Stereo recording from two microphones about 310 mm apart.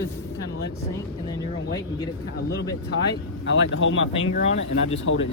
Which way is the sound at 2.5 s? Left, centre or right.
Left.